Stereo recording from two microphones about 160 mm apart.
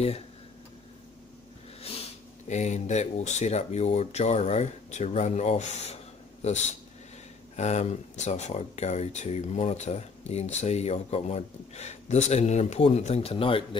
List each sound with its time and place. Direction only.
1.8 s speech: 40° left (ahead or behind)